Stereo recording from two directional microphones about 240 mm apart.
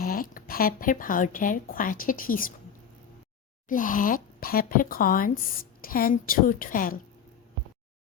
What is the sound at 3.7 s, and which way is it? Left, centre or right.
Speech, left.